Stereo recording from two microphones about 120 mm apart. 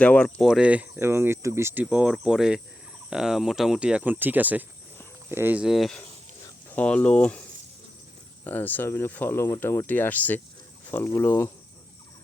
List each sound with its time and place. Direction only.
0.0 s speech: 10° left (ahead or behind)
0.4 s speech: 5° right (ahead or behind)
5.6 s speech: centre (ahead or behind)
6.7 s speech: 10° left (ahead or behind)
8.4 s speech: 15° left (ahead or behind)